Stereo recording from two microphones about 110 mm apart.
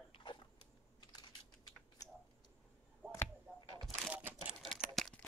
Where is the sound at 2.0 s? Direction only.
35° left (ahead or behind).